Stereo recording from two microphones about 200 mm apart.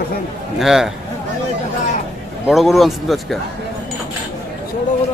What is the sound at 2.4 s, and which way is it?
Speech, centre (ahead or behind).